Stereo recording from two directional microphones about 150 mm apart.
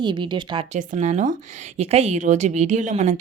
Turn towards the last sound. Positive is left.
turn(degrees=-55)  # may be behind; listen again after turning